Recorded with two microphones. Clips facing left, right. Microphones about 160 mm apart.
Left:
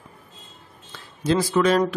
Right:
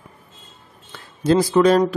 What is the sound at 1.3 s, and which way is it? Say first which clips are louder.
Speech: right 5 dB; 35° right (ahead or behind).